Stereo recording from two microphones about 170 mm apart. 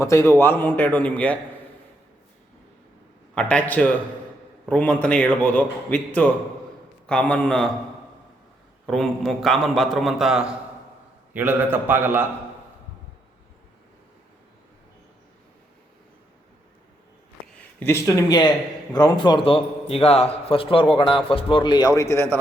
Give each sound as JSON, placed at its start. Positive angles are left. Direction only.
{"t": 0.0, "sound": "a man's voice", "side_deg": 15}
{"t": 3.3, "sound": "a man's voice", "side_deg": 5}
{"t": 8.9, "sound": "a man's voice", "side_deg": 0}
{"t": 17.7, "sound": "a man's voice", "side_deg": 15}